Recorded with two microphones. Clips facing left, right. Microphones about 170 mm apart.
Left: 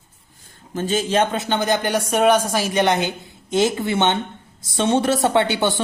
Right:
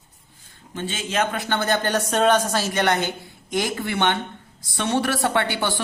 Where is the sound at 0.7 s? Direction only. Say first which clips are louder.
Left 8 dB; 40° left (ahead or behind).